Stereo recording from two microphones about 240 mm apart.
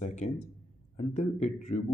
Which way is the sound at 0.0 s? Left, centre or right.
Left.